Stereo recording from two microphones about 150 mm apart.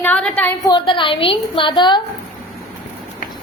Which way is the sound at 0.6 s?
30° left (ahead or behind).